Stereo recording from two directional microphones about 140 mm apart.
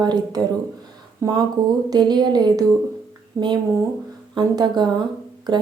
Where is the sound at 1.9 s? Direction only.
30° right (ahead or behind).